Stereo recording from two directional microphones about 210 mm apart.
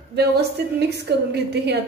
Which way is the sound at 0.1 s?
50° right (ahead or behind).